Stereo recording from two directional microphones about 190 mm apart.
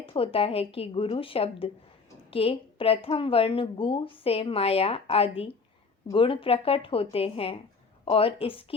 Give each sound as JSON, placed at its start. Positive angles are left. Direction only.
{"t": 0.0, "sound": "a woman's voice", "side_deg": 30}